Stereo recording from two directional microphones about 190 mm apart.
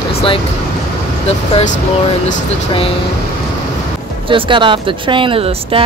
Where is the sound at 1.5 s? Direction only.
40° left (ahead or behind).